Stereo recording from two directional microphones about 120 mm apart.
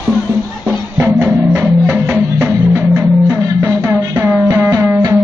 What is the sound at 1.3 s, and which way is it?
Music, 15° right (ahead or behind).